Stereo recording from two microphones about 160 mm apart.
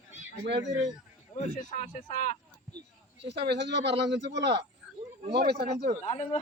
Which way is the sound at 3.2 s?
90° right.